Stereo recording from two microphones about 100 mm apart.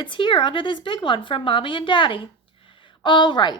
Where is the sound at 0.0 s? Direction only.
55° left (ahead or behind).